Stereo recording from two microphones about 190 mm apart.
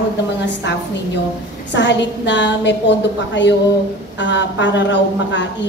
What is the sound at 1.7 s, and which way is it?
A woman's voice, 70° left (ahead or behind).